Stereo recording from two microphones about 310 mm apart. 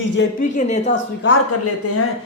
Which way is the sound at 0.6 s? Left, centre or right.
Left.